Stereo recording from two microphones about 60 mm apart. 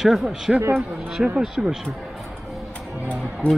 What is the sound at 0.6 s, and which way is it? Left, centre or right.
Speech, right.